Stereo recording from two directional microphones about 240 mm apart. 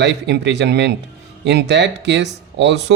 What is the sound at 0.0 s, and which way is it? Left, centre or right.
Speech, right.